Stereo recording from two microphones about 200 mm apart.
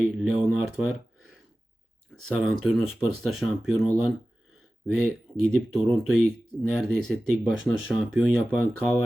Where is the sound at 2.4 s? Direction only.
Centre (ahead or behind).